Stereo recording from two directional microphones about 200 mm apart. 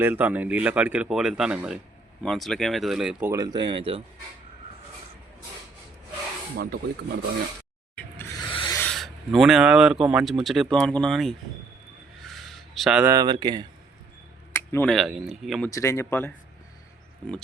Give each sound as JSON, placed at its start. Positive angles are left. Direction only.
{"t": 0.0, "sound": "speech", "side_deg": -10}
{"t": 7.9, "sound": "music", "side_deg": 10}
{"t": 8.4, "sound": "a sound", "side_deg": 25}
{"t": 8.7, "sound": "speech", "side_deg": 5}
{"t": 12.2, "sound": "a sound", "side_deg": 0}
{"t": 13.1, "sound": "speech", "side_deg": -20}
{"t": 14.5, "sound": "speech", "side_deg": 10}
{"t": 15.7, "sound": "speech", "side_deg": 15}